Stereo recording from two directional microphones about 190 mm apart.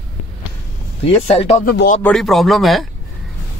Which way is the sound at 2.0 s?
Centre (ahead or behind).